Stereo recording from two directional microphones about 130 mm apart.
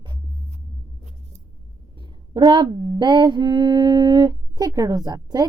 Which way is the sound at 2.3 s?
35° right (ahead or behind).